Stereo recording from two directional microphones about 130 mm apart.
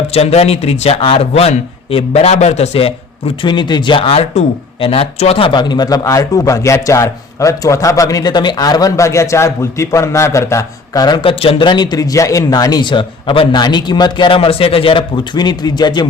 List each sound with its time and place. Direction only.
0.1 s speech: 50° left (ahead or behind); by 16.0 s 35° left (ahead or behind)